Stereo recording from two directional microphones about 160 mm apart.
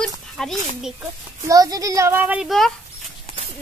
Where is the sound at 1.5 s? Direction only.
20° right (ahead or behind); by 2.7 s centre (ahead or behind).